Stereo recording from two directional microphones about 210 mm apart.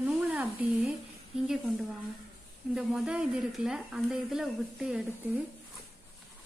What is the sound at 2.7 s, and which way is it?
Speech, 5° right (ahead or behind).